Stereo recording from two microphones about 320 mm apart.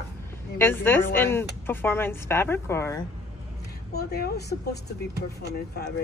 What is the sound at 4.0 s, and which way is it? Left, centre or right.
A woman's voice, left.